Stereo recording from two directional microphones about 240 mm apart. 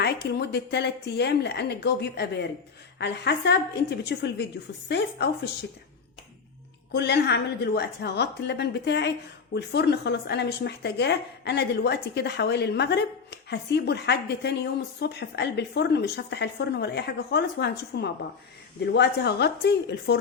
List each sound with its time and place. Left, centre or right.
0.0 s a woman's voice: left
6.9 s a woman's voice: left